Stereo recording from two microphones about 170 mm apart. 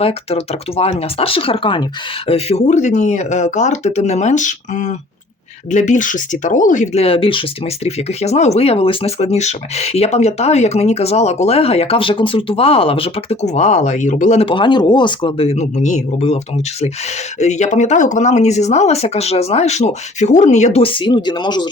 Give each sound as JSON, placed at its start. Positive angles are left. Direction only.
{"t": 0.0, "sound": "speech", "side_deg": 35}
{"t": 17.4, "sound": "speech", "side_deg": 45}